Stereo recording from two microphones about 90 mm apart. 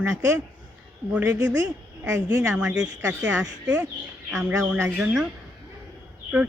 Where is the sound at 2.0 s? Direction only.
35° right (ahead or behind).